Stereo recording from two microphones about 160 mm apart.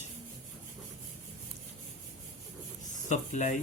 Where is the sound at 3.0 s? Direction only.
45° left (ahead or behind).